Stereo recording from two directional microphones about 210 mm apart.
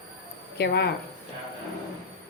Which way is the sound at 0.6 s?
50° left (ahead or behind).